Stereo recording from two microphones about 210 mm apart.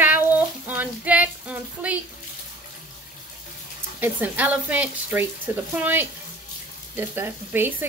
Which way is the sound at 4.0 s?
10° right (ahead or behind).